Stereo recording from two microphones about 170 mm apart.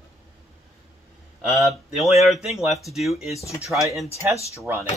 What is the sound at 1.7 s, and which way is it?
Speech, centre (ahead or behind).